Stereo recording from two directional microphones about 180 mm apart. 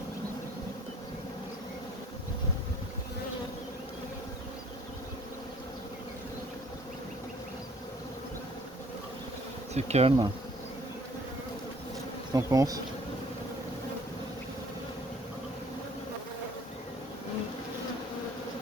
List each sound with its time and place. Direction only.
9.7 s bee: 35° right (ahead or behind)
12.3 s bee: 20° right (ahead or behind)